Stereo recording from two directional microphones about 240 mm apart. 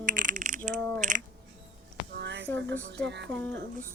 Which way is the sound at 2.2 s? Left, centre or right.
Right.